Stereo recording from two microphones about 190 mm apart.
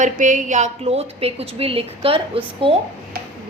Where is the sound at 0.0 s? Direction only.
40° right (ahead or behind).